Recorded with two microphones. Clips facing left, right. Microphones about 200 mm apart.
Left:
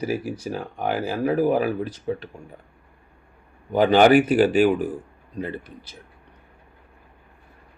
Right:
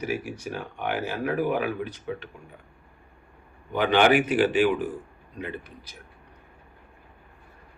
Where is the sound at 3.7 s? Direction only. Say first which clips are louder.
Left 5 dB; 40° left (ahead or behind).